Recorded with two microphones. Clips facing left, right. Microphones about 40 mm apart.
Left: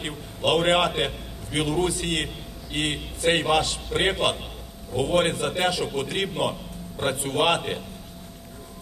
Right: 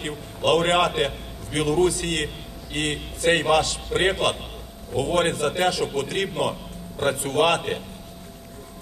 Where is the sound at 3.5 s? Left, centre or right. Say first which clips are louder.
Right 2 dB; left.